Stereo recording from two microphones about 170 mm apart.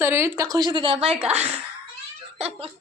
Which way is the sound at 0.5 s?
25° right (ahead or behind).